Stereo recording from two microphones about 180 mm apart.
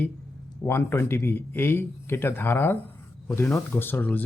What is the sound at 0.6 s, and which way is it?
Speech, 10° left (ahead or behind).